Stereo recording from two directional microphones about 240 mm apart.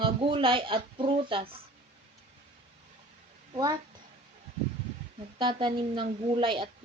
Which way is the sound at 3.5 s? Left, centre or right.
Centre.